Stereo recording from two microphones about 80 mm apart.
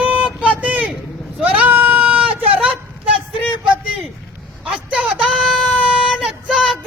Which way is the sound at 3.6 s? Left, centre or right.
Centre.